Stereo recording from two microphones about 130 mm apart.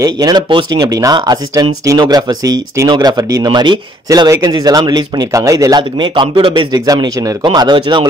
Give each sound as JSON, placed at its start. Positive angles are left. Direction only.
{"t": 0.0, "sound": "speech", "side_deg": -30}